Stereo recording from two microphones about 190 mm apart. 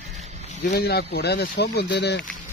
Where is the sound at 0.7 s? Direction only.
55° left (ahead or behind).